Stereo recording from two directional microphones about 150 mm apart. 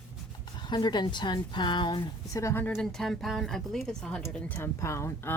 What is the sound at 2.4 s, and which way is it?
Speech, 15° left (ahead or behind).